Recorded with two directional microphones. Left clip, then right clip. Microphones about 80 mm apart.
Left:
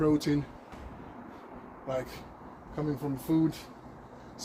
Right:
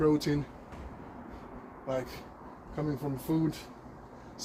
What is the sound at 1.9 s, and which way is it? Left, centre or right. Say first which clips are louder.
Speech: even; left.